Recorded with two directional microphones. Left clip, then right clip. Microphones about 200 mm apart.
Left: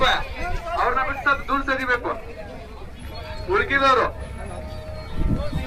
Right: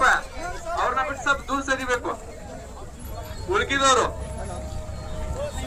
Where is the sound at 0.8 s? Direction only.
25° right (ahead or behind).